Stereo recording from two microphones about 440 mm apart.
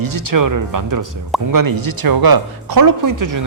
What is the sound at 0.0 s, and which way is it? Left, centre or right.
Speech, right.